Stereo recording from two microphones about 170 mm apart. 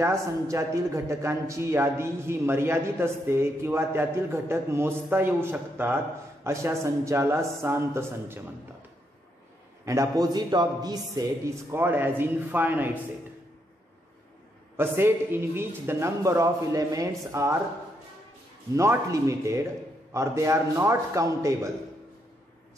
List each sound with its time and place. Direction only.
0.0 s a man's voice: 15° right (ahead or behind)
9.8 s a man's voice: 20° right (ahead or behind)
14.8 s a man's voice: 15° right (ahead or behind)
18.8 s a man's voice: 20° right (ahead or behind)